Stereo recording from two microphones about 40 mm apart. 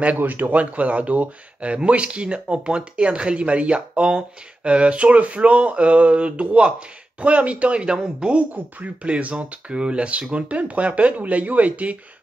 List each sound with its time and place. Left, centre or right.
0.2 s speech: right